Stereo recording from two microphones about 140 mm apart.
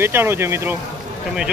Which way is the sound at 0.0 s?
15° right (ahead or behind).